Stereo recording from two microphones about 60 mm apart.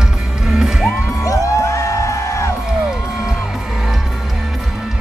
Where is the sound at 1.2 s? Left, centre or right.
Left.